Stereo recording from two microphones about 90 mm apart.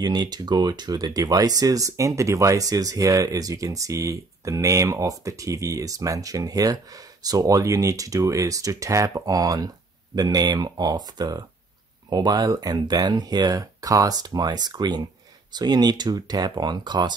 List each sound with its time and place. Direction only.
0.0 s speech: 50° right (ahead or behind)